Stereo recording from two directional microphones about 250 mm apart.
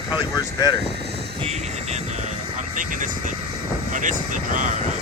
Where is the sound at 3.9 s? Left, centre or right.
Right.